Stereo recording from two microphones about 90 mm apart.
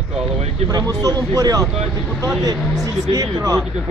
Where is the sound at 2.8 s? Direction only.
45° right (ahead or behind).